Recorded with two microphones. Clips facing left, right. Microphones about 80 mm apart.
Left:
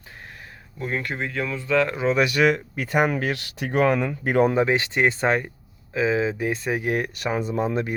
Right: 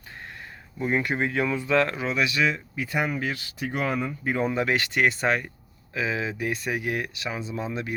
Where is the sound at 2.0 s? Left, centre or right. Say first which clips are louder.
Left 5 dB; left.